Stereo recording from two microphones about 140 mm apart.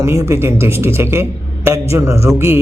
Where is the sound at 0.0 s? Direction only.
20° right (ahead or behind).